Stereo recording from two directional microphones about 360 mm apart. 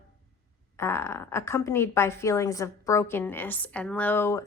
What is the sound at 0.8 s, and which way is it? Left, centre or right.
A woman's voice, centre.